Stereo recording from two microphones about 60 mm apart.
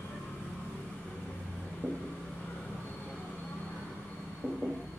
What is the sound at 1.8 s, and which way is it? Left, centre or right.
Vehicle, left.